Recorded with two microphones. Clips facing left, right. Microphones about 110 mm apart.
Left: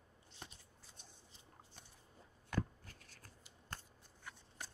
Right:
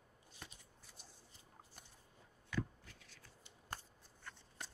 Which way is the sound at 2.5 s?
45° left (ahead or behind).